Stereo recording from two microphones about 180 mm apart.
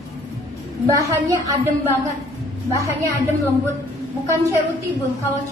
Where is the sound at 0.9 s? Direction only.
15° right (ahead or behind).